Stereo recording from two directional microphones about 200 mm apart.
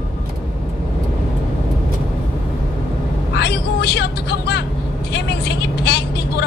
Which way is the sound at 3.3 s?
55° left (ahead or behind).